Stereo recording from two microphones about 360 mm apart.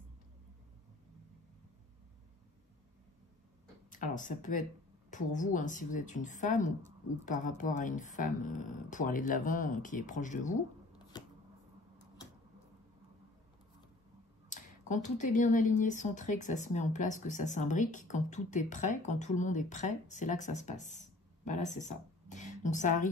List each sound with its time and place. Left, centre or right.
3.9 s speech: left
11.1 s shuffling cards: centre
14.5 s speech: left